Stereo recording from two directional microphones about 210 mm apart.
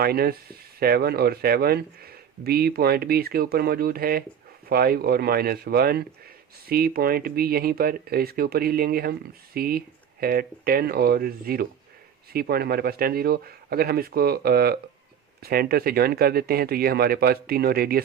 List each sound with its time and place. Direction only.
0.0 s speech: 45° right (ahead or behind)